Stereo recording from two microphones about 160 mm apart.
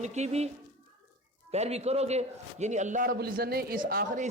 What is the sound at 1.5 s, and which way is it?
Speech, 40° right (ahead or behind).